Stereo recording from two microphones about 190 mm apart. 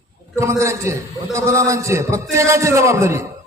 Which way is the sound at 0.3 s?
15° right (ahead or behind).